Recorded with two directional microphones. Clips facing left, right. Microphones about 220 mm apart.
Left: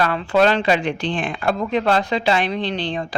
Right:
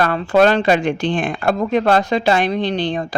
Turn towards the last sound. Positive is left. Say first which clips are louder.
# right 4 dB
turn(degrees=-45)  # may be behind; listen again after turning